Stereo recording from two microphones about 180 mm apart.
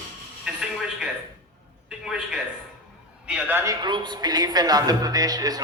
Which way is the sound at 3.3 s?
10° right (ahead or behind).